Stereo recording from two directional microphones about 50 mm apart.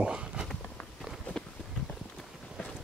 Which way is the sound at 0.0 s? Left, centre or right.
Centre.